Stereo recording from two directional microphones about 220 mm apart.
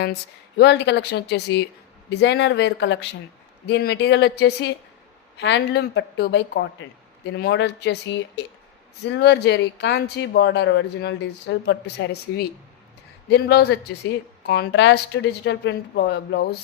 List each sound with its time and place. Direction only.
0.0 s speech: 50° left (ahead or behind)